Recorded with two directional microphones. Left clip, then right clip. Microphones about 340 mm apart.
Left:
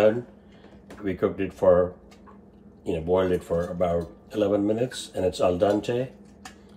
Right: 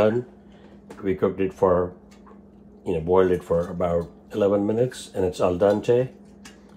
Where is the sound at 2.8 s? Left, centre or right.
Centre.